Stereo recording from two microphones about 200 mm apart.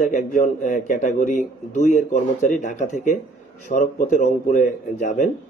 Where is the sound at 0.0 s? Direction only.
40° left (ahead or behind).